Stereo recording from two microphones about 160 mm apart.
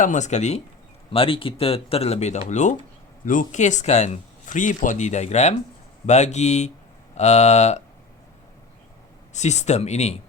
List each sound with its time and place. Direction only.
0.0 s speech: 50° left (ahead or behind)
1.1 s speech: 35° left (ahead or behind)
9.3 s speech: 45° left (ahead or behind)